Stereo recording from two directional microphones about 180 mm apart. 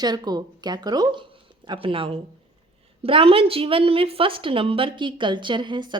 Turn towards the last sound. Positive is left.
turn(degrees=-25)  # may be behind; listen again after turning